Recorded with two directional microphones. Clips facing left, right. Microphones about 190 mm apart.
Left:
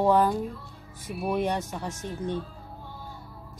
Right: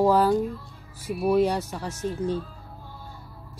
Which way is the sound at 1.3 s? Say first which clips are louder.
Right 5 dB; 15° left (ahead or behind).